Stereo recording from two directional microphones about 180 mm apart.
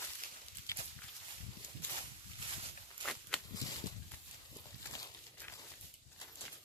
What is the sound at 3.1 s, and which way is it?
Walk, 5° left (ahead or behind).